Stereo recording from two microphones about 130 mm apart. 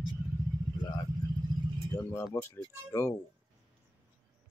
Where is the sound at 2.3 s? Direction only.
20° left (ahead or behind).